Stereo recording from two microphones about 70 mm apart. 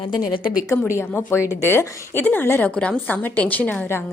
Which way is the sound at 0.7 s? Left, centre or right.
Left.